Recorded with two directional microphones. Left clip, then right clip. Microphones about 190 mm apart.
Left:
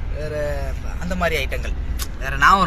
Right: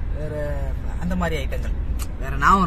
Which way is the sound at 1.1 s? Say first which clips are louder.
Left 6 dB; 15° right (ahead or behind).